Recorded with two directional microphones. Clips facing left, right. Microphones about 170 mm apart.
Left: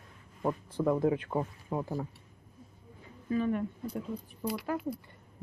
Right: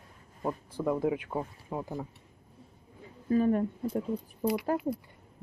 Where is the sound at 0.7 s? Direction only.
5° right (ahead or behind).